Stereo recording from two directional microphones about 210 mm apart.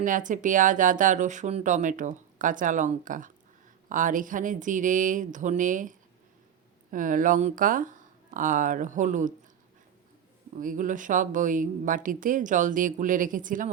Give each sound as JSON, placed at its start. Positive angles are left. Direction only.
{"t": 0.0, "sound": "speech", "side_deg": -40}
{"t": 10.6, "sound": "speech", "side_deg": -40}